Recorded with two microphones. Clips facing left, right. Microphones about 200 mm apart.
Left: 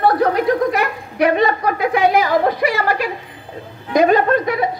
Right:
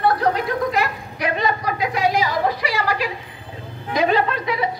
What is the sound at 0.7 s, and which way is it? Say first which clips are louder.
A woman's voice: left 3 dB; 55° left (ahead or behind).